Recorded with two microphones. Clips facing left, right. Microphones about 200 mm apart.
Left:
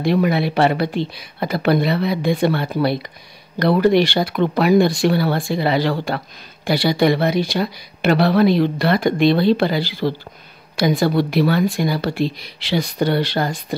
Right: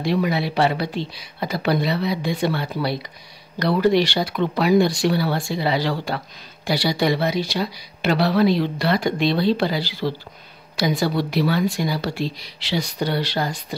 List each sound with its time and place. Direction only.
0.0 s speech: 55° left (ahead or behind)